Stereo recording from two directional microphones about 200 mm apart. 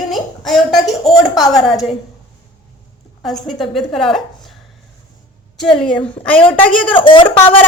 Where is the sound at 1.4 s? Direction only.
Centre (ahead or behind).